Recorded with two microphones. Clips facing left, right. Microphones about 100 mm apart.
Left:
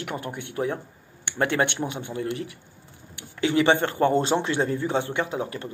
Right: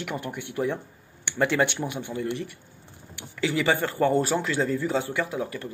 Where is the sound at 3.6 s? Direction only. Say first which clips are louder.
Even; 20° left (ahead or behind).